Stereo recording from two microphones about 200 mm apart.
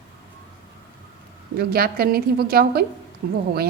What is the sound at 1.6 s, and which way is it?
A woman's voice, 50° right (ahead or behind).